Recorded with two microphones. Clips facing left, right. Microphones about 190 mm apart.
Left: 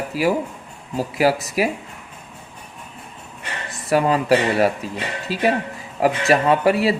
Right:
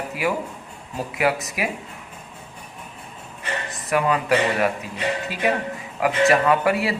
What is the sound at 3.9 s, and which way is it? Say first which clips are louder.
Speech: left 4 dB; 30° left (ahead or behind).